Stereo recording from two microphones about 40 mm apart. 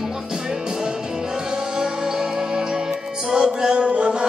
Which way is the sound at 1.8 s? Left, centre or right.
Centre.